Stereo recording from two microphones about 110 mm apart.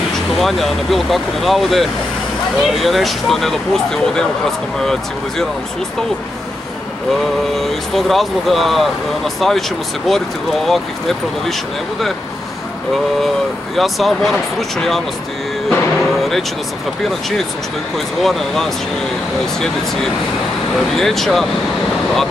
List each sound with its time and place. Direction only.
0.4 s speech: centre (ahead or behind)
7.5 s speech: centre (ahead or behind)
13.7 s speech: centre (ahead or behind)
15.7 s music: centre (ahead or behind)
17.9 s speech: 5° left (ahead or behind)